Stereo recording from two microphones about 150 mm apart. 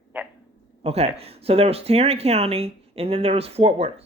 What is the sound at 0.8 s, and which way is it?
Speech, 45° right (ahead or behind).